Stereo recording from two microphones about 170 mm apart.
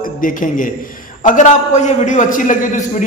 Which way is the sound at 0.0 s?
50° left (ahead or behind).